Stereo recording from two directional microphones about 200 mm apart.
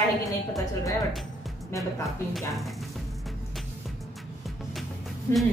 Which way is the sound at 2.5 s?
Centre (ahead or behind).